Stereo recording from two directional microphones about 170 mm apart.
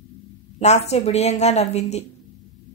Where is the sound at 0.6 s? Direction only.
40° left (ahead or behind).